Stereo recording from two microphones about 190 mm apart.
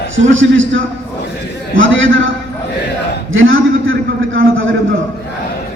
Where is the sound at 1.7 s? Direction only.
90° right.